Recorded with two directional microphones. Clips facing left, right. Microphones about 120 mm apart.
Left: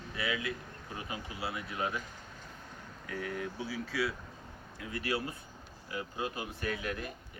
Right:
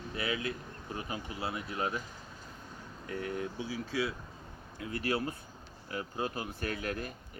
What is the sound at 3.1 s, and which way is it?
Speech, 30° right (ahead or behind).